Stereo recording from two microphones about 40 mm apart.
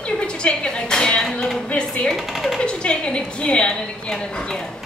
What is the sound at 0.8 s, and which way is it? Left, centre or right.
A woman's voice, left.